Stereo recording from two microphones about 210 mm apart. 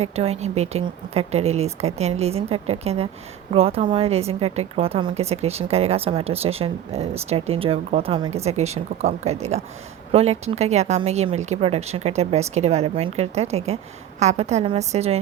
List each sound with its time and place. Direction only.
0.0 s a woman's voice: 30° right (ahead or behind)